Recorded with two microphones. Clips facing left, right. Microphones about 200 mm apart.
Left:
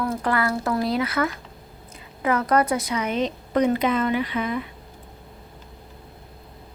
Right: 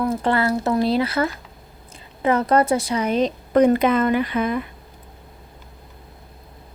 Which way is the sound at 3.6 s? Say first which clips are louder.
Right 5 dB; 50° right (ahead or behind).